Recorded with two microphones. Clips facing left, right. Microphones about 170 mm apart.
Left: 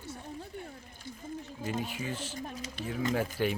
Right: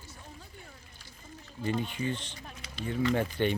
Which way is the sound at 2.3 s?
45° left (ahead or behind).